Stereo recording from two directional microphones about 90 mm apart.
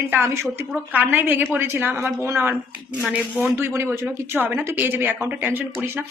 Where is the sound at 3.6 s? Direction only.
30° right (ahead or behind).